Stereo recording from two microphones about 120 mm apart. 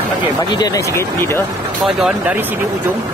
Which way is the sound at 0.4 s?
35° left (ahead or behind).